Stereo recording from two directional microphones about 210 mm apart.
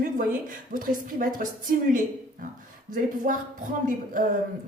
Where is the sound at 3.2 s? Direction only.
40° right (ahead or behind).